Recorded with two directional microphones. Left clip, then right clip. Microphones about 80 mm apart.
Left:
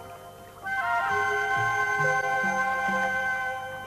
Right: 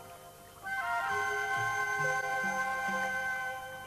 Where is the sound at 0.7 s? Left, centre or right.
Right.